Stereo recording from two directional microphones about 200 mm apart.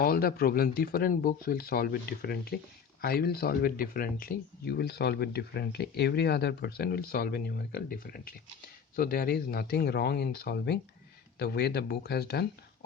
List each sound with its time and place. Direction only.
0.0 s speech: 50° left (ahead or behind)